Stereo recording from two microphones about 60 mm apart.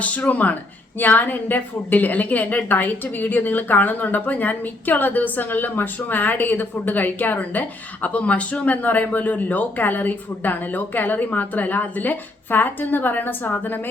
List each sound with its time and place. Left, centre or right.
0.0 s a woman's voice: left